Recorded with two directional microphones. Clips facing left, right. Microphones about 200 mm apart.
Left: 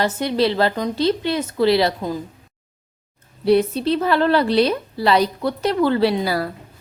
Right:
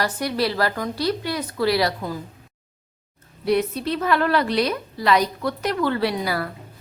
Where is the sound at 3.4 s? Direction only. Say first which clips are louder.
Left 5 dB; 30° left (ahead or behind).